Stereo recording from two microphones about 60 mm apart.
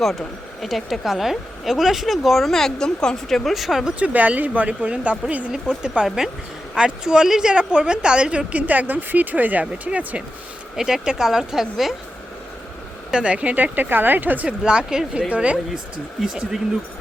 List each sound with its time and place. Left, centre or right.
0.0 s speech: centre
4.0 s a woman's voice: right
10.8 s speech: centre
13.1 s a woman's voice: centre; by 14.4 s right
14.4 s a woman's voice: centre